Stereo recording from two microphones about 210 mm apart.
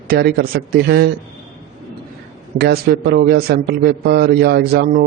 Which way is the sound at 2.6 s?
50° right (ahead or behind).